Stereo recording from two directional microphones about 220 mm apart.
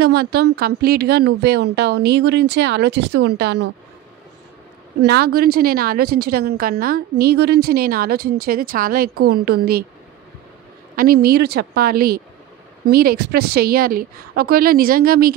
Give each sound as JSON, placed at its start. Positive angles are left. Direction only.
{"t": 0.0, "sound": "a woman's voice", "side_deg": -45}
{"t": 5.0, "sound": "a woman's voice", "side_deg": -45}
{"t": 11.0, "sound": "a woman's voice", "side_deg": -45}